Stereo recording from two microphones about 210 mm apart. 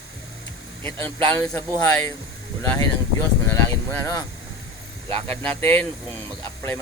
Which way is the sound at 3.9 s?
15° left (ahead or behind).